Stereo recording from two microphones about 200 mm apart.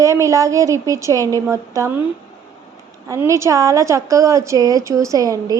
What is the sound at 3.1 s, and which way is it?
A woman's voice, 15° right (ahead or behind).